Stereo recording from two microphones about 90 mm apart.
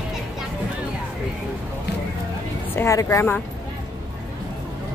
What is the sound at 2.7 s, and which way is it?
Speech, 30° left (ahead or behind).